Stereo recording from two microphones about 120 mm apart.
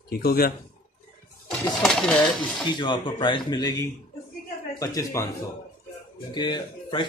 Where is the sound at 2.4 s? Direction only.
40° left (ahead or behind).